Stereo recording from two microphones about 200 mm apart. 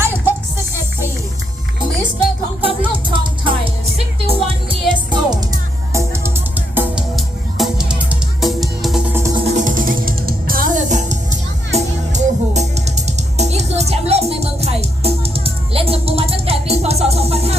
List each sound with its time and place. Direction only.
2.6 s music: 25° right (ahead or behind); by 9.1 s centre (ahead or behind)
9.1 s music: 15° right (ahead or behind)
9.4 s music: 40° right (ahead or behind)